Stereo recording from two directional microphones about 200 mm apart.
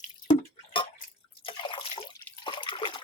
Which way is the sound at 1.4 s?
25° left (ahead or behind).